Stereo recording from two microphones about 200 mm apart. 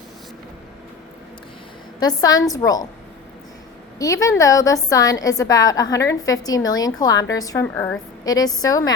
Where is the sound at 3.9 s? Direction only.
15° left (ahead or behind).